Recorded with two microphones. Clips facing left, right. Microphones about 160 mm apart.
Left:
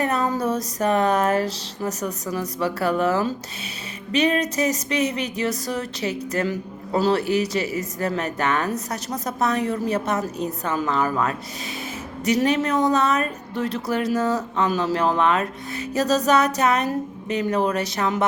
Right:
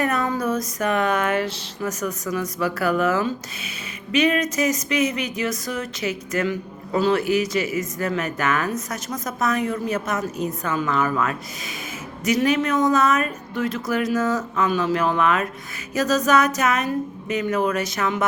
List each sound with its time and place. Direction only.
0.0 s speech: 30° left (ahead or behind)
12.2 s speech: 35° left (ahead or behind)